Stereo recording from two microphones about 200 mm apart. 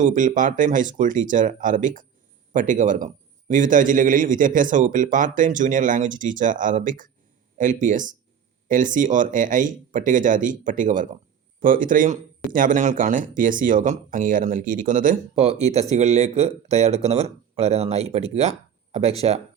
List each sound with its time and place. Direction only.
0.0 s speech: 40° right (ahead or behind)